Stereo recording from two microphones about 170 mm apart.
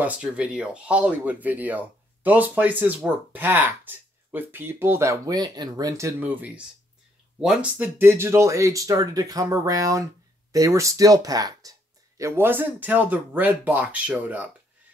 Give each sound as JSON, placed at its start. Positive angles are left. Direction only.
{"t": 0.0, "sound": "speech", "side_deg": -5}